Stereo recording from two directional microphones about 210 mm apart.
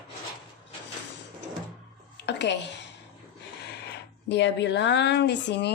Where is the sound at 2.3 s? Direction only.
55° left (ahead or behind).